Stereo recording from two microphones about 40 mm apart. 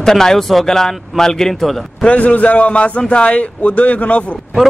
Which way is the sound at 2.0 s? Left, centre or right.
Left.